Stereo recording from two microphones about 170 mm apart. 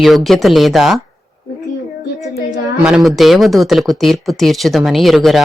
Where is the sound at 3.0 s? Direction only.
Centre (ahead or behind).